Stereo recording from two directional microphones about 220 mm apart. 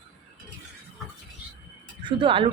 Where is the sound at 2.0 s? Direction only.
25° right (ahead or behind).